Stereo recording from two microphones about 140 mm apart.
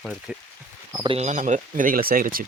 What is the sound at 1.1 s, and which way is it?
Speech, 55° right (ahead or behind).